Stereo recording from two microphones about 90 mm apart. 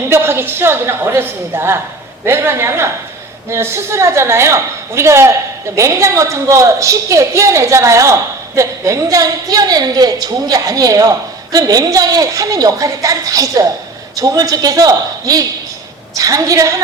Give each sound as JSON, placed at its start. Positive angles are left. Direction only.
{"t": 0.1, "sound": "a woman's voice", "side_deg": -25}